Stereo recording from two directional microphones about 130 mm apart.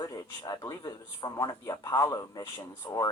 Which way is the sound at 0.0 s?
30° left (ahead or behind).